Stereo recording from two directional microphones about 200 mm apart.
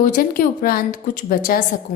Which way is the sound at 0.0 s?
45° left (ahead or behind).